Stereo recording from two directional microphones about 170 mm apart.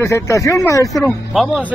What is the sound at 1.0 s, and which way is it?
Speech, 5° right (ahead or behind).